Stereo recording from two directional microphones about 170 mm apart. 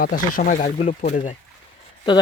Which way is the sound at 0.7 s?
45° left (ahead or behind).